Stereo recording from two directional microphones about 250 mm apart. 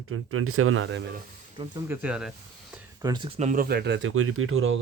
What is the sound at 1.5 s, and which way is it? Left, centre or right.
Speech, centre.